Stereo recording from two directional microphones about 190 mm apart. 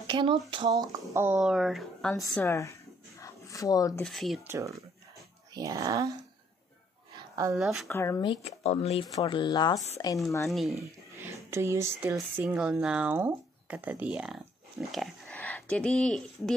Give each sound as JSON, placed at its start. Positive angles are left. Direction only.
{"t": 0.0, "sound": "speech", "side_deg": -25}
{"t": 1.1, "sound": "speech", "side_deg": -10}
{"t": 2.3, "sound": "a sound", "side_deg": 15}
{"t": 4.0, "sound": "speech", "side_deg": 0}
{"t": 4.5, "sound": "speech", "side_deg": -15}
{"t": 7.2, "sound": "a sound", "side_deg": -20}
{"t": 7.5, "sound": "speech", "side_deg": 0}
{"t": 7.9, "sound": "speech", "side_deg": 15}
{"t": 8.3, "sound": "speech", "side_deg": 35}
{"t": 10.5, "sound": "speech", "side_deg": 0}
{"t": 10.8, "sound": "speech", "side_deg": -15}